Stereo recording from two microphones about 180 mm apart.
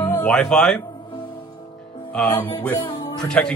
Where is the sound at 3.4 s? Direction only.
5° left (ahead or behind).